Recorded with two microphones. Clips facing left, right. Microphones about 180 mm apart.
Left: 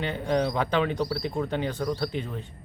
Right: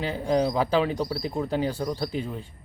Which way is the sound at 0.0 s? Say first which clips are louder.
Right 2 dB; 5° right (ahead or behind).